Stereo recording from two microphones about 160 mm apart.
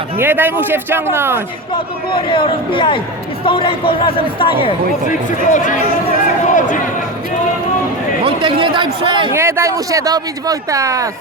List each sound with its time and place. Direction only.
0.2 s a man's voice: 10° right (ahead or behind)
2.1 s speech: 35° left (ahead or behind)
5.0 s speech: 50° left (ahead or behind)
6.5 s a sound: 55° left (ahead or behind)
8.2 s a man's voice: 30° right (ahead or behind)
9.3 s speech: 15° right (ahead or behind)